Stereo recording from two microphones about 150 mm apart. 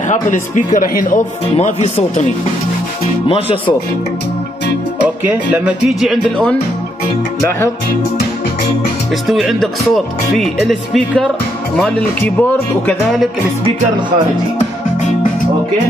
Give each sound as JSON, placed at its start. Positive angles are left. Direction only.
{"t": 0.1, "sound": "speech", "side_deg": 60}
{"t": 3.3, "sound": "speech", "side_deg": 40}
{"t": 5.0, "sound": "speech", "side_deg": -10}
{"t": 9.3, "sound": "speech", "side_deg": 0}